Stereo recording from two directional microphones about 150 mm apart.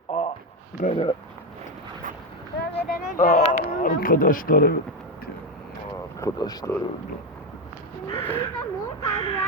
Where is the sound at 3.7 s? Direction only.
70° left (ahead or behind); by 4.8 s 85° left.